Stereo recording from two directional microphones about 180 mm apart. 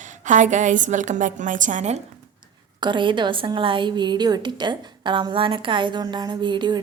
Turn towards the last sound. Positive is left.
turn(degrees=-25)  # may be behind; listen again after turning